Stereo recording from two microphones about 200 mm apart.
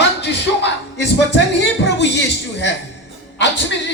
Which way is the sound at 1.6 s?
60° left (ahead or behind).